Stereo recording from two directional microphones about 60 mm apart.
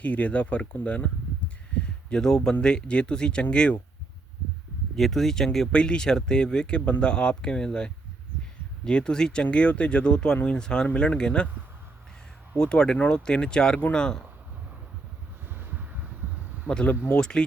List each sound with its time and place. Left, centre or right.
0.0 s speech: left
4.9 s speech: centre
12.5 s speech: centre
15.5 s a sound: right
16.6 s speech: left
17.2 s speech: centre